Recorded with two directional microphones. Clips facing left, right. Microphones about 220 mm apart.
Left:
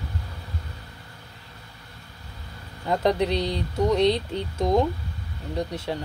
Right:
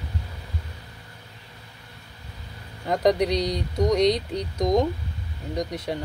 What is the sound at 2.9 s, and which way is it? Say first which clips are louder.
Speech: right 1 dB; 15° right (ahead or behind).